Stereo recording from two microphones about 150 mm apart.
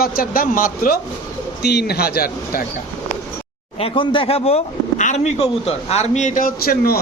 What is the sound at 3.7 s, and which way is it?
Speech, 35° left (ahead or behind).